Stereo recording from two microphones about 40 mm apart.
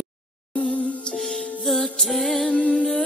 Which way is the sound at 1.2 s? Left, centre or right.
Centre.